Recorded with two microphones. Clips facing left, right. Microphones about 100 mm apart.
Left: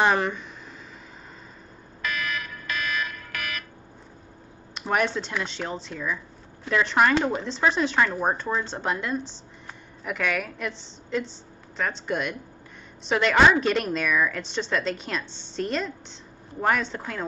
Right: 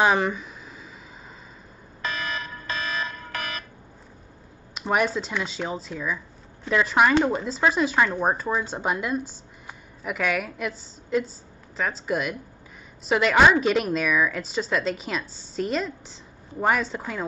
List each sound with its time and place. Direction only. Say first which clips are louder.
0.0 s a woman's voice: right 1 dB; 5° right (ahead or behind)
2.0 s alarm: even; 30° right (ahead or behind)
4.7 s a woman's voice: right 1 dB; 5° right (ahead or behind)